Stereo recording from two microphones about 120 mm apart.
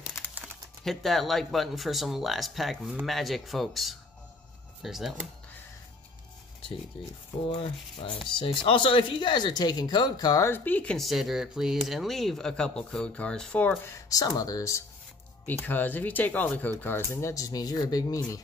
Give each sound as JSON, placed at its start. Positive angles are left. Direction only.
{"t": 0.8, "sound": "speech", "side_deg": 0}
{"t": 7.4, "sound": "rub", "side_deg": 50}
{"t": 8.3, "sound": "speech", "side_deg": 45}
{"t": 10.4, "sound": "speech", "side_deg": 15}
{"t": 13.9, "sound": "speech", "side_deg": 30}
{"t": 15.6, "sound": "speech", "side_deg": 15}